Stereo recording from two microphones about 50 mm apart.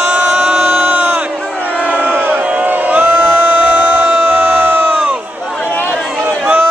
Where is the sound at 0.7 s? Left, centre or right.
Right.